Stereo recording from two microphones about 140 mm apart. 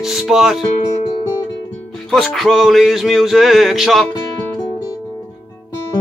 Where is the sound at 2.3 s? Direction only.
Centre (ahead or behind).